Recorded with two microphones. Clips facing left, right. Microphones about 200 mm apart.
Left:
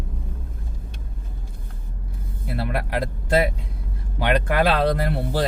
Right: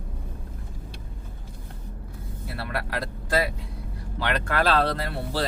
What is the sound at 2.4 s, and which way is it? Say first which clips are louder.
Speech: left 5 dB; 20° left (ahead or behind).